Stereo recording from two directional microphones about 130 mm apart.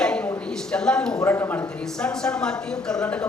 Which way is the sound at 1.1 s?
20° left (ahead or behind).